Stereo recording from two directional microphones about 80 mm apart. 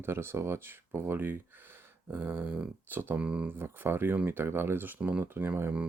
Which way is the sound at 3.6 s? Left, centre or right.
Right.